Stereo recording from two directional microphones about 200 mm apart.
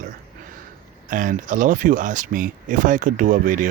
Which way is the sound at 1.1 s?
40° right (ahead or behind).